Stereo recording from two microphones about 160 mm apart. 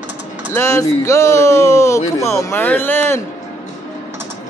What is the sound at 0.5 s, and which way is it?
Speech, 20° left (ahead or behind).